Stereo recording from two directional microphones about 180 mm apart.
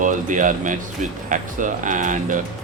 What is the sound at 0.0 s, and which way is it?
Speech, 45° right (ahead or behind).